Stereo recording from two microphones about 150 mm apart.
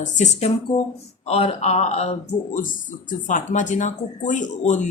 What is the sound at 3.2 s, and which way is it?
Speech, 55° left (ahead or behind).